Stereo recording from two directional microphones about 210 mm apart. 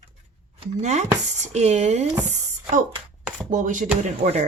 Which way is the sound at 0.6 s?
35° right (ahead or behind).